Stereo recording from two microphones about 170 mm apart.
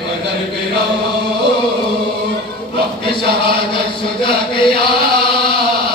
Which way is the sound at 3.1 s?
30° left (ahead or behind).